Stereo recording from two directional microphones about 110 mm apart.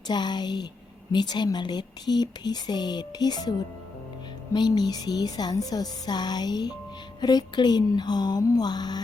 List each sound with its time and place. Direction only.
0.1 s speech: 40° left (ahead or behind)
4.5 s speech: 40° left (ahead or behind)